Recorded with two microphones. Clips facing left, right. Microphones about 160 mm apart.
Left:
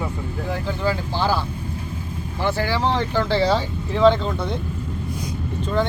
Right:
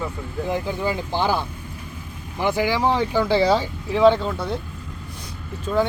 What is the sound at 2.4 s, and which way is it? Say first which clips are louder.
Speech: right 2 dB; 15° right (ahead or behind).